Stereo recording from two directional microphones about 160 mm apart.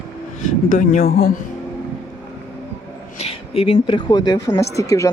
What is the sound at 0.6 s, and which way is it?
Speech, 55° left (ahead or behind).